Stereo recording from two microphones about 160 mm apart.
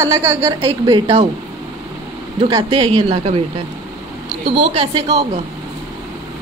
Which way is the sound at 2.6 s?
35° right (ahead or behind).